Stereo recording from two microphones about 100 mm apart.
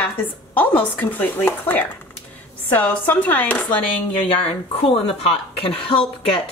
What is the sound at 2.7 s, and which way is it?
A woman's voice, 20° left (ahead or behind).